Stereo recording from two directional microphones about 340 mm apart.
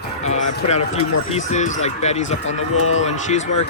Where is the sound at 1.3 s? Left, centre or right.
Left.